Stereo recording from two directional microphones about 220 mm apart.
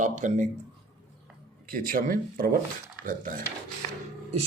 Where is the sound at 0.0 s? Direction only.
35° right (ahead or behind).